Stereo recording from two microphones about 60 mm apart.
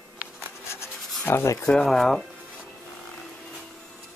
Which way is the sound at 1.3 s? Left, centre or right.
Left.